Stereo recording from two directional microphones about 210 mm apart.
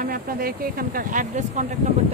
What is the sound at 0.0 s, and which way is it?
Speech, 45° right (ahead or behind).